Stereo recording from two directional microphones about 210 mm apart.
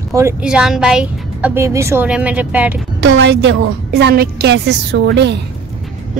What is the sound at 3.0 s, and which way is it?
A woman's voice, 55° right (ahead or behind).